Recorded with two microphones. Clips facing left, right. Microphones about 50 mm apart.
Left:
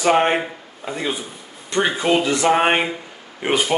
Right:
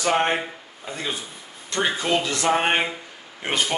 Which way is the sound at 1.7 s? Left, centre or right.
Left.